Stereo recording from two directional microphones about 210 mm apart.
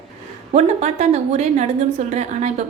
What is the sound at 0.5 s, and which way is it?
A woman's voice, 30° right (ahead or behind).